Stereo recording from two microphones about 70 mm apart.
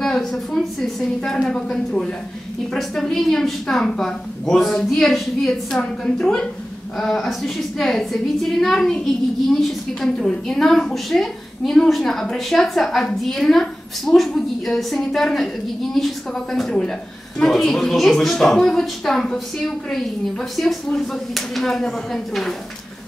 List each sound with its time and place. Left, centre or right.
0.0 s a woman's voice: centre